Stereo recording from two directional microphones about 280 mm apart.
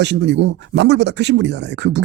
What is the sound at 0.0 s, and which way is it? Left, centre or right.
A man's voice, right.